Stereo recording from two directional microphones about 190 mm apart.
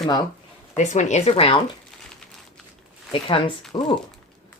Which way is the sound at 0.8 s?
40° left (ahead or behind).